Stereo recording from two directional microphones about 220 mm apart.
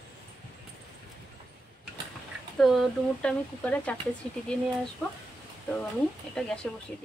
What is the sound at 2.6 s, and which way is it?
Speech, centre (ahead or behind).